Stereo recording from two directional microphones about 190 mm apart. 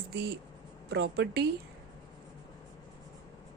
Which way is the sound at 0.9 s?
60° right (ahead or behind).